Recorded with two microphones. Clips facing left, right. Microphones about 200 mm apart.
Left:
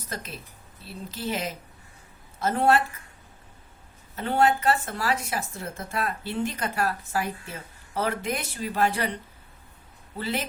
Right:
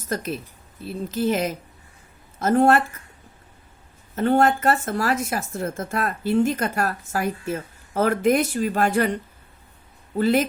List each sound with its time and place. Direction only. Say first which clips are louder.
0.1 s speech: right 11 dB; 45° right (ahead or behind)
4.1 s speech: right 4 dB; 45° right (ahead or behind)